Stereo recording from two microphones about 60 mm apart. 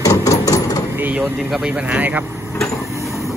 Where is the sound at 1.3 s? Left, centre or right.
Centre.